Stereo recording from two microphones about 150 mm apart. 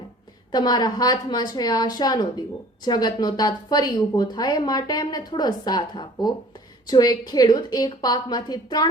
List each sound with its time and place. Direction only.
0.5 s a woman's voice: 25° left (ahead or behind)